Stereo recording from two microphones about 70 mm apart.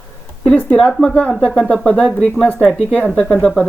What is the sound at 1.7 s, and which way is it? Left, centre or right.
Speech, centre.